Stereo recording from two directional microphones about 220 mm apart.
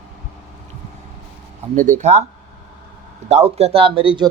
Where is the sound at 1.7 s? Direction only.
35° right (ahead or behind).